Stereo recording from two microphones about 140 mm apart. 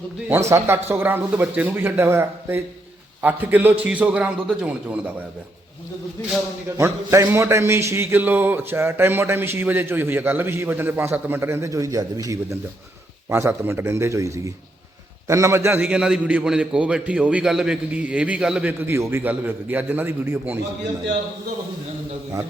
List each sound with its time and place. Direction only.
0.3 s speech: 20° right (ahead or behind)
6.7 s a man's voice: 20° right (ahead or behind)